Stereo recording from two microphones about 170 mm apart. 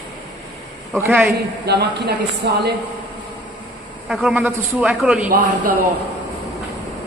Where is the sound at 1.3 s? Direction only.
70° right (ahead or behind).